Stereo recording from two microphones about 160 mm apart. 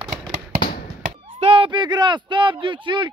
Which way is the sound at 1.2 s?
35° right (ahead or behind).